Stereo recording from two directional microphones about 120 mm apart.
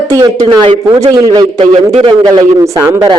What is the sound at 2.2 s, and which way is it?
Speech, 30° right (ahead or behind).